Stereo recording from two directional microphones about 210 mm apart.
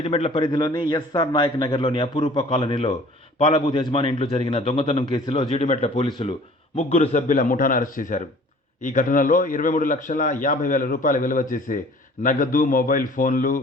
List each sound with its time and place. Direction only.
0.0 s a man's voice: 30° left (ahead or behind)